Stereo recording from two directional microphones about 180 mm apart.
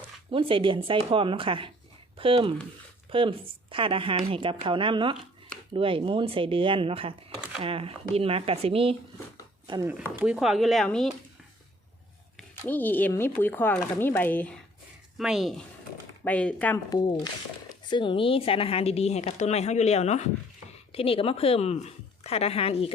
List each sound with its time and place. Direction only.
0.3 s speech: 30° right (ahead or behind)
10.2 s speech: 5° right (ahead or behind)
12.4 s speech: 10° left (ahead or behind)
15.2 s speech: centre (ahead or behind)
17.7 s a woman's voice: 25° left (ahead or behind)